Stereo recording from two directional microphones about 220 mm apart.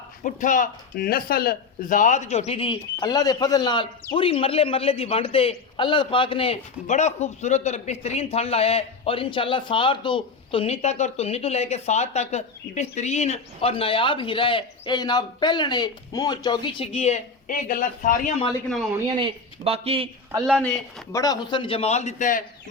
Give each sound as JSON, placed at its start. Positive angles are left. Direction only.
{"t": 0.2, "sound": "speech", "side_deg": 35}
{"t": 19.0, "sound": "speech", "side_deg": -20}
{"t": 20.5, "sound": "speech", "side_deg": 0}
{"t": 21.1, "sound": "speech", "side_deg": 15}